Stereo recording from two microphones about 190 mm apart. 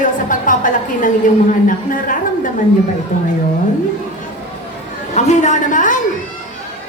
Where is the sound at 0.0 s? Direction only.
45° left (ahead or behind).